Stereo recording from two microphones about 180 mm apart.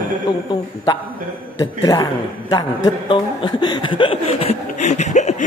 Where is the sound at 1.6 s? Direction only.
20° left (ahead or behind).